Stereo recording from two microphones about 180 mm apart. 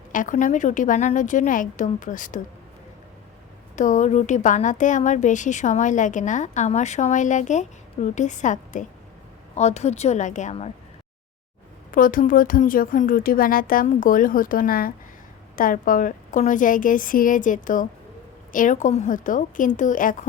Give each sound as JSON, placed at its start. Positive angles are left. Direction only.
{"t": 0.1, "sound": "a woman's voice", "side_deg": 45}
{"t": 3.8, "sound": "a woman's voice", "side_deg": 45}
{"t": 11.9, "sound": "a woman's voice", "side_deg": 50}